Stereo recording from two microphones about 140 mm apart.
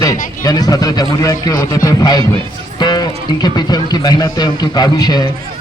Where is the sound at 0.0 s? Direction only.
25° left (ahead or behind).